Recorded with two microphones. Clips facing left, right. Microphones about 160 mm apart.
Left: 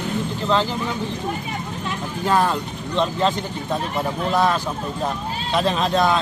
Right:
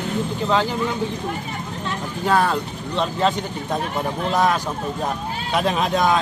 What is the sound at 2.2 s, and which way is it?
Speech, 5° right (ahead or behind).